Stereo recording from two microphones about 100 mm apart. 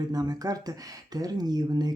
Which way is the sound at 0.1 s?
40° right (ahead or behind).